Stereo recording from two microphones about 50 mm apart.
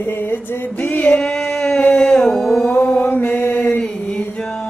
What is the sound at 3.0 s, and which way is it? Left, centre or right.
Female singing, left.